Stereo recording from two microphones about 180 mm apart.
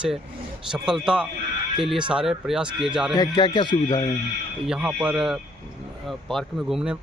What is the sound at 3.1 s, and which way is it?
Speech, 25° left (ahead or behind).